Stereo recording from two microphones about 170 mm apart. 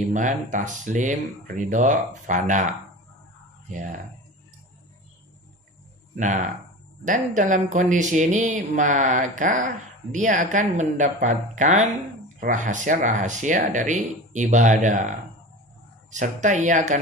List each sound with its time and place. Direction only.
0.1 s speech: 50° right (ahead or behind)
3.7 s speech: 45° right (ahead or behind)
6.1 s speech: 45° right (ahead or behind)
16.1 s speech: 45° right (ahead or behind)